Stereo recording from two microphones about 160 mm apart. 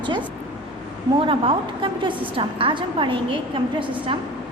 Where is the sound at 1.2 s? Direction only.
35° right (ahead or behind).